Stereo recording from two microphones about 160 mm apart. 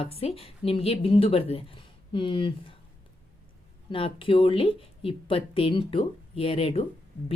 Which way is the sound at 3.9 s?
35° left (ahead or behind).